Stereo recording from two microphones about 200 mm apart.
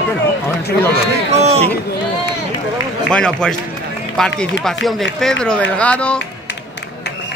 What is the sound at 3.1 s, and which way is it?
Speech, 5° left (ahead or behind).